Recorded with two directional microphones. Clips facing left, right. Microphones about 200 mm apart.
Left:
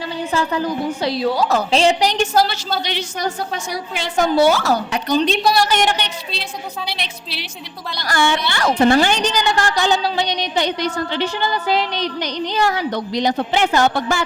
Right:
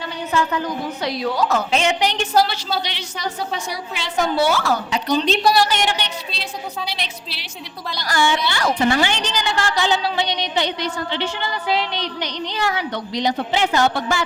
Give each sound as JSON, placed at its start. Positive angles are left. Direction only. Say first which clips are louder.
{"t": 0.3, "sound": "a woman's voice", "louder": "left 1 dB", "side_deg": 35}
{"t": 5.1, "sound": "a woman's voice", "louder": "left 1 dB", "side_deg": 0}
{"t": 5.6, "sound": "a woman's voice", "louder": "left 4 dB", "side_deg": 50}
{"t": 6.8, "sound": "a woman's voice", "louder": "left 1 dB", "side_deg": 60}